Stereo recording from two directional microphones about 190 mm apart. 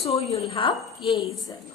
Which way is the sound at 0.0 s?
30° left (ahead or behind).